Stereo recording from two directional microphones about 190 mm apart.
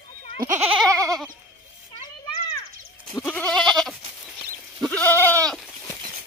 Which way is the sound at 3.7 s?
Centre (ahead or behind).